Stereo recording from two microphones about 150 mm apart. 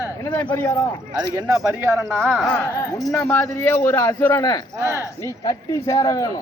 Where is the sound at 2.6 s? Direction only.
20° left (ahead or behind).